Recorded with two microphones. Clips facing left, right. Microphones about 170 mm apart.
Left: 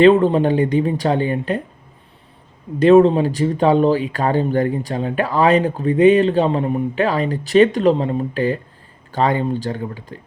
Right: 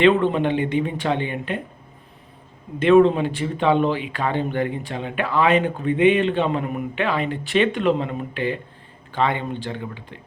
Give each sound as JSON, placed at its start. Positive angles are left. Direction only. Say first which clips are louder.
{"t": 0.0, "sound": "speech", "louder": "left 5 dB", "side_deg": 40}
{"t": 2.7, "sound": "speech", "louder": "left 4 dB", "side_deg": 40}